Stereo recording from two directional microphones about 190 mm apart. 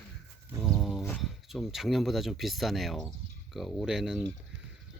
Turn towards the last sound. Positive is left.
turn(degrees=0)  # may be behind; listen again after turning